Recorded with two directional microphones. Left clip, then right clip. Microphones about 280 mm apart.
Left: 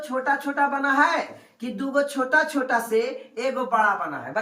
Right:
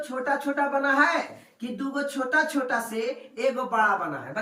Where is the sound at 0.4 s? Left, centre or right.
Centre.